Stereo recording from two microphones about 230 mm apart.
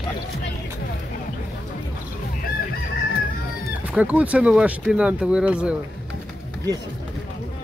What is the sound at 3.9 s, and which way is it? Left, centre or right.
Speech, centre.